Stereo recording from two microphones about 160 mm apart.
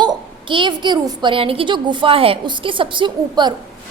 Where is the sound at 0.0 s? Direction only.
30° right (ahead or behind).